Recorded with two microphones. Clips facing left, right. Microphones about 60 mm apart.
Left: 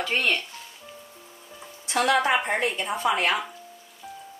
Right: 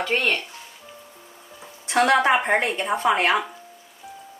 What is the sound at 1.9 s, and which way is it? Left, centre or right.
Speech, right.